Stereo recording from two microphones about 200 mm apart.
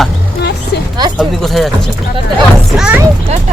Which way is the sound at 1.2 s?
Centre (ahead or behind).